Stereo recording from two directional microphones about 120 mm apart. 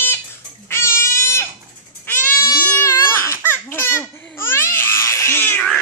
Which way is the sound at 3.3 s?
20° left (ahead or behind).